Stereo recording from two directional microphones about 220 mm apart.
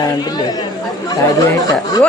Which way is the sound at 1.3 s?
15° left (ahead or behind).